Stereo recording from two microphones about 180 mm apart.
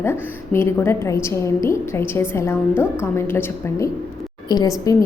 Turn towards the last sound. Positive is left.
turn(degrees=20)  # may be behind; listen again after turning